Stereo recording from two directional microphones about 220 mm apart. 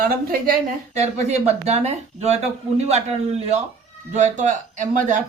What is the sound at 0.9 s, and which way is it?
Speech, 30° right (ahead or behind).